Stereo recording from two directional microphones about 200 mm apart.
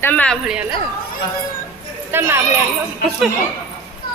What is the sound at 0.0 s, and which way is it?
Speech, 10° left (ahead or behind).